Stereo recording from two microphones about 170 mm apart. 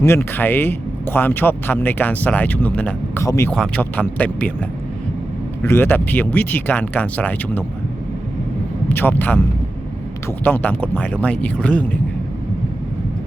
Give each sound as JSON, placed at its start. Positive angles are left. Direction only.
{"t": 0.0, "sound": "speech", "side_deg": 15}
{"t": 3.5, "sound": "speech", "side_deg": 5}
{"t": 5.6, "sound": "speech", "side_deg": 15}
{"t": 8.9, "sound": "speech", "side_deg": 10}